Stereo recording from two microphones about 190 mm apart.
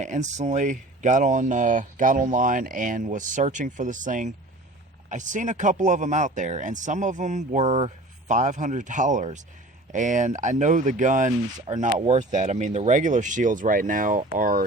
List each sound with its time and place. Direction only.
0.0 s speech: 40° right (ahead or behind)